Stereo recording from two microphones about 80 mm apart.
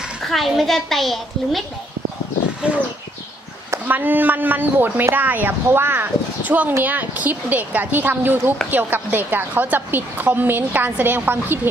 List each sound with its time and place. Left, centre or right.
0.3 s a child's voice: centre
3.8 s a woman's voice: right